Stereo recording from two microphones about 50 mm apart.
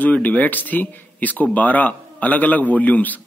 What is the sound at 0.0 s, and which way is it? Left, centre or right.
A man's voice, left.